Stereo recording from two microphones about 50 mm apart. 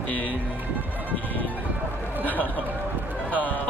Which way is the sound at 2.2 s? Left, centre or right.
Left.